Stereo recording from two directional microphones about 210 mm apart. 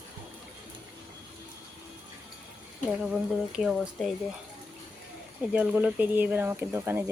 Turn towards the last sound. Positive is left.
turn(degrees=-10)  # may be behind; listen again after turning